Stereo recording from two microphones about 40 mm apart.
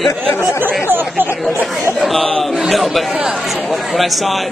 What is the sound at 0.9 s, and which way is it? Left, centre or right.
Speech, right.